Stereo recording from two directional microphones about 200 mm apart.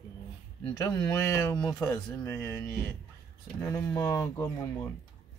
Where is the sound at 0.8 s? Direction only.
15° left (ahead or behind).